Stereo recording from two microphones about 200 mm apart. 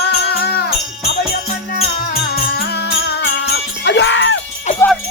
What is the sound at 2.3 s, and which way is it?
Music, 55° left (ahead or behind).